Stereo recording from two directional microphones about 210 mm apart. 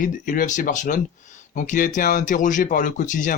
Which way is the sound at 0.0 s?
40° left (ahead or behind).